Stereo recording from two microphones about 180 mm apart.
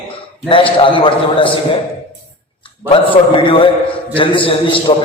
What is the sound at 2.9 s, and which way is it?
A man's voice, 30° left (ahead or behind).